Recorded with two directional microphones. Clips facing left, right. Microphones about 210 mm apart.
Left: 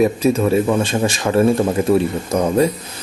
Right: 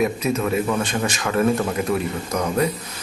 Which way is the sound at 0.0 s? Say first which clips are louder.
Left 6 dB; 30° left (ahead or behind).